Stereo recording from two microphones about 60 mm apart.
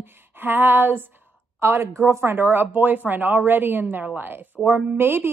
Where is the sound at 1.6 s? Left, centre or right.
Right.